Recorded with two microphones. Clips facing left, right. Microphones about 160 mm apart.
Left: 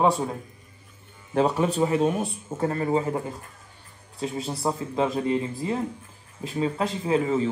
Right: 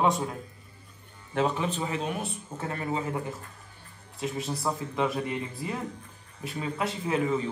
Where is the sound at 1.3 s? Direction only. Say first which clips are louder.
Left 5 dB; 35° left (ahead or behind).